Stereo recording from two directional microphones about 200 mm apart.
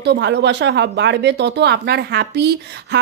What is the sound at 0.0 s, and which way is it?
Speech, 60° right (ahead or behind).